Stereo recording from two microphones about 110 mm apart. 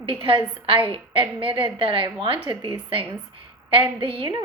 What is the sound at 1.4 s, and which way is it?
A woman's voice, 50° right (ahead or behind).